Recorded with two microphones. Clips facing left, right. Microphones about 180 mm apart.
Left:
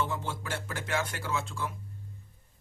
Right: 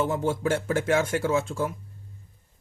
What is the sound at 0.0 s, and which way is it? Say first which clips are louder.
Speech: right 9 dB; 45° right (ahead or behind).